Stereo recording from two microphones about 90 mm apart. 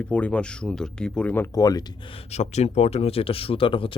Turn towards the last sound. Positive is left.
turn(degrees=75)  # may be behind; listen again after turning